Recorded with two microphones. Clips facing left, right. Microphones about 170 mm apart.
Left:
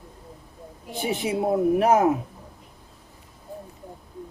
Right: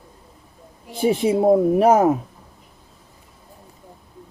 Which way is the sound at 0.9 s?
30° right (ahead or behind).